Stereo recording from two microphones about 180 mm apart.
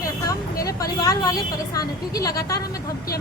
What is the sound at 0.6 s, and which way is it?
A woman's voice, 20° left (ahead or behind).